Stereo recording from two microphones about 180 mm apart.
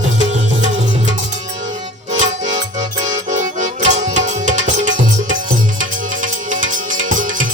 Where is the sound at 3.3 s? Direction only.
40° right (ahead or behind).